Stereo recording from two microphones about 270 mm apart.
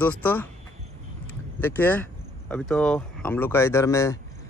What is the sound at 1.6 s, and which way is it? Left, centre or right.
Speech, centre.